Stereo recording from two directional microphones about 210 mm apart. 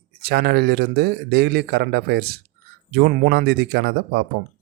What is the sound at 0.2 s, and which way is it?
A man's voice, 50° right (ahead or behind).